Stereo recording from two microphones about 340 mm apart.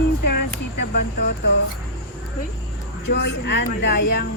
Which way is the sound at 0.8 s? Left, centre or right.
Left.